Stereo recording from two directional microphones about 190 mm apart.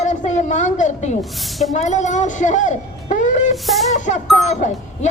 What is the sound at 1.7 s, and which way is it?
A man's voice, 40° left (ahead or behind).